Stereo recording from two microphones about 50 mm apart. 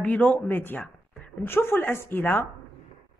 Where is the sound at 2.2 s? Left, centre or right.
Left.